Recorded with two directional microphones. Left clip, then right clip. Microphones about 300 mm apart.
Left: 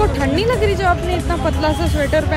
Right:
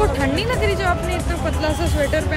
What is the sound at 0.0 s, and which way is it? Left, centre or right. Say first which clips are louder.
Music: left 3 dB; centre.